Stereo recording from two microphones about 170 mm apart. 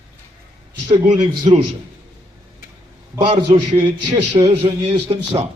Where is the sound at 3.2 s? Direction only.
30° right (ahead or behind).